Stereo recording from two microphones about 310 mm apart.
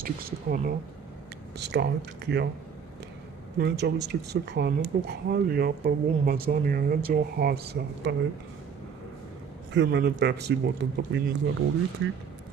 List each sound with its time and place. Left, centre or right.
0.0 s speech: right
3.5 s speech: right
9.8 s speech: right